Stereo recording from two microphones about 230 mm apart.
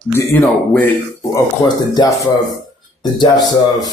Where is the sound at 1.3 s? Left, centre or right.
Centre.